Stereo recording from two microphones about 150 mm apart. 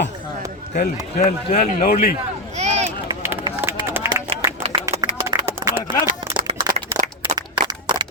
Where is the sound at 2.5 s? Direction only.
50° right (ahead or behind).